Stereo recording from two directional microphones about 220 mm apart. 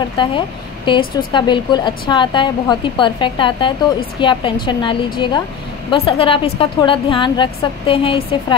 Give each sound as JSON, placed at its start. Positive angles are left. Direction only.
{"t": 0.2, "sound": "a woman's voice", "side_deg": 20}